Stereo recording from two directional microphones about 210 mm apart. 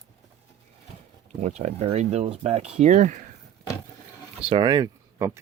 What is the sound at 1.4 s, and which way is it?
Speech, 30° right (ahead or behind).